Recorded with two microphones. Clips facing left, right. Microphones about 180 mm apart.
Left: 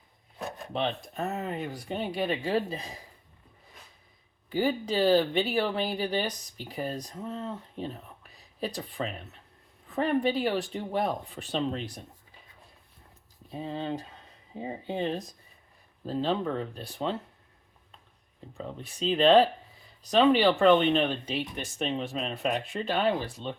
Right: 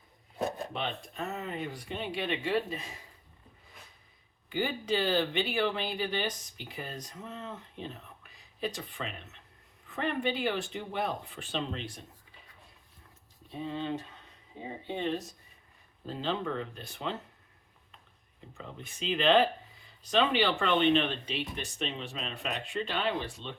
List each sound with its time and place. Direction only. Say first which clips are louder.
0.7 s speech: left 5 dB; 40° left (ahead or behind)
4.4 s speech: left 4 dB; 40° left (ahead or behind)
13.5 s speech: left 1 dB; 40° left (ahead or behind)
18.5 s speech: left 6 dB; 35° left (ahead or behind)